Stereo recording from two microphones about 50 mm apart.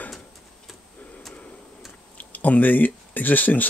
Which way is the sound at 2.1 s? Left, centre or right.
Left.